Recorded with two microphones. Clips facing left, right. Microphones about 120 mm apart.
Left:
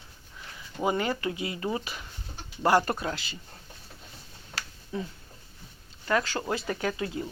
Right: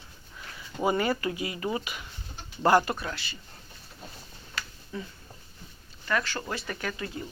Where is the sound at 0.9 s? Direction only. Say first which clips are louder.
Right 1 dB; 20° left (ahead or behind).